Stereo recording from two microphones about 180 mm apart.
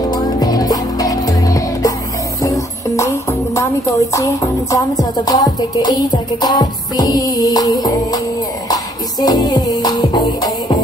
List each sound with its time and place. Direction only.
0.1 s music: 20° left (ahead or behind)
2.4 s speech: 15° left (ahead or behind)
8.6 s music: 20° left (ahead or behind)